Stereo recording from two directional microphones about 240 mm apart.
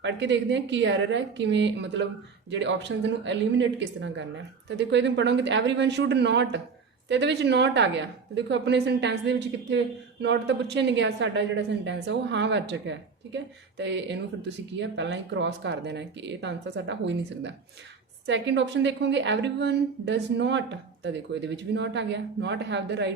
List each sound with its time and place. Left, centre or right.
0.0 s a woman's voice: right